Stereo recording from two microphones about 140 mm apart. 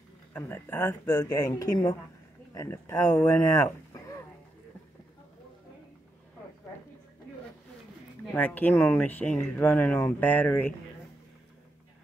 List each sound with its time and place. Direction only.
0.3 s speech: 15° left (ahead or behind)
8.3 s speech: 10° left (ahead or behind)